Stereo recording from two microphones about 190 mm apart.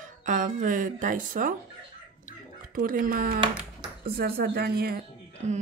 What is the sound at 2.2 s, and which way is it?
Chicken, 45° right (ahead or behind).